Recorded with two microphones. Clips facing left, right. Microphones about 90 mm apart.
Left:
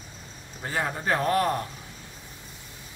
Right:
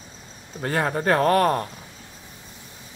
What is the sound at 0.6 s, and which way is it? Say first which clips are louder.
Speech: right 6 dB; 55° right (ahead or behind).